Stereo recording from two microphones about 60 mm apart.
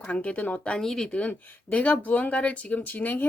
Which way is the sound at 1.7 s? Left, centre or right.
Left.